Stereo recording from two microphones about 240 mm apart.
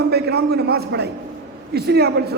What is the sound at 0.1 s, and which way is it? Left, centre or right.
A man's voice, right.